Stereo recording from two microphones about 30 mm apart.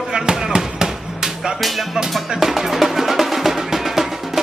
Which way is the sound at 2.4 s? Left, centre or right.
Centre.